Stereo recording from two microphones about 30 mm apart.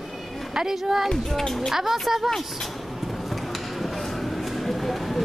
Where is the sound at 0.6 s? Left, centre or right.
Centre.